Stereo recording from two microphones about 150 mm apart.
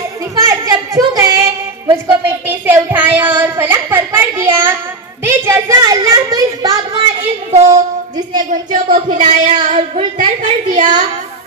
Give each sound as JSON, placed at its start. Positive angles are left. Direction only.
{"t": 0.4, "sound": "a sound", "side_deg": -20}
{"t": 5.2, "sound": "a child's voice", "side_deg": -15}
{"t": 7.5, "sound": "a woman's voice", "side_deg": -45}
{"t": 8.4, "sound": "a woman's voice", "side_deg": -60}